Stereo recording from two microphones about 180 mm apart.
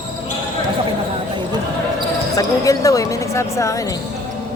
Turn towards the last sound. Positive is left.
turn(degrees=15)  # may be behind; listen again after turning